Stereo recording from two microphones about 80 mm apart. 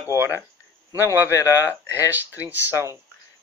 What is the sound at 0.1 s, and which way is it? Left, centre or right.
Speech, left.